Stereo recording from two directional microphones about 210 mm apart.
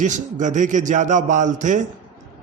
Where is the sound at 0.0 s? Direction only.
35° right (ahead or behind).